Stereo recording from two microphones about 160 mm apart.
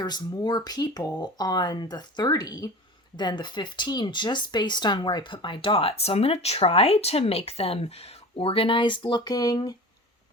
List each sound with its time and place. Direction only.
0.0 s speech: 25° left (ahead or behind)